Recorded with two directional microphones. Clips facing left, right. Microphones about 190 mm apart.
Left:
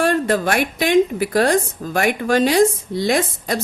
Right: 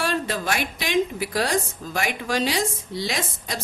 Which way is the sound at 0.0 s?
55° left (ahead or behind).